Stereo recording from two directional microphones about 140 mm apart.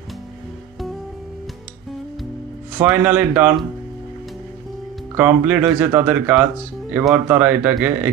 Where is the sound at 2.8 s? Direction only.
15° right (ahead or behind).